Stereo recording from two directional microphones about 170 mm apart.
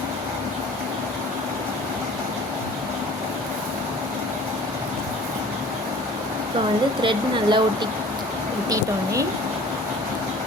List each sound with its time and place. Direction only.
7.0 s speech: 30° right (ahead or behind)